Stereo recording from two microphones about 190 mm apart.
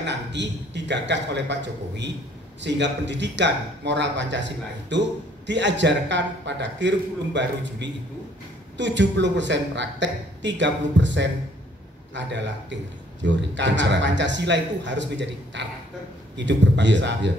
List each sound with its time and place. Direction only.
0.0 s a woman's voice: 65° right (ahead or behind)